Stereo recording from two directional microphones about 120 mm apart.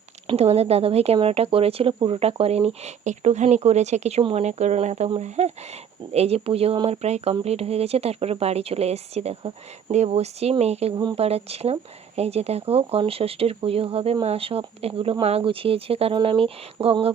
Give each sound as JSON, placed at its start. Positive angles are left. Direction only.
{"t": 0.3, "sound": "speech", "side_deg": -60}
{"t": 2.1, "sound": "speech", "side_deg": -60}
{"t": 4.2, "sound": "speech", "side_deg": -55}